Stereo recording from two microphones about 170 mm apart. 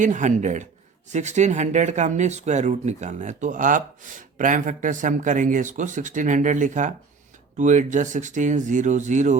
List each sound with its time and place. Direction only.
0.0 s speech: 50° right (ahead or behind)